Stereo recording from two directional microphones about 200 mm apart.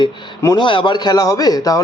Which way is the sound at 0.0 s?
20° left (ahead or behind).